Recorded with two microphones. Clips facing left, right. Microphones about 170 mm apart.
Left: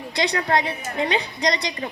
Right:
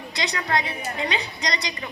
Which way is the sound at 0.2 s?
55° left (ahead or behind).